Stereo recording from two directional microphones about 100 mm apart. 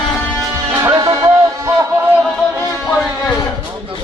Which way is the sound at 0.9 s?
35° right (ahead or behind).